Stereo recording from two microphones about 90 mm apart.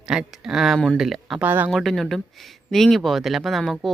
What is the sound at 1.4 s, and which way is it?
Speech, 20° right (ahead or behind).